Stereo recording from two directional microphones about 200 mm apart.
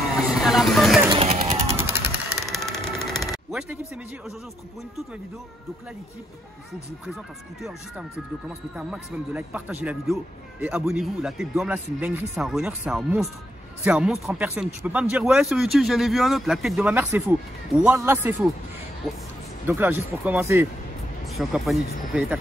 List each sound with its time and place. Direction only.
0.3 s vehicle: centre (ahead or behind)
1.0 s music: 25° right (ahead or behind)
1.8 s vehicle: 10° right (ahead or behind)
8.7 s speech: 5° right (ahead or behind)
19.7 s speech: 10° right (ahead or behind)
21.3 s speech: centre (ahead or behind)